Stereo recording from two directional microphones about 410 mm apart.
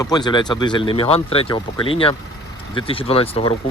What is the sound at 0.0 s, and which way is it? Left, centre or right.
Speech, centre.